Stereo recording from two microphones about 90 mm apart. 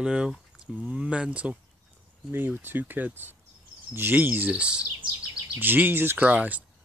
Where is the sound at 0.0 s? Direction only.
10° right (ahead or behind).